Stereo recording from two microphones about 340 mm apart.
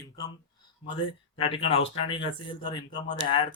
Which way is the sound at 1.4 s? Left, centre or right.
Centre.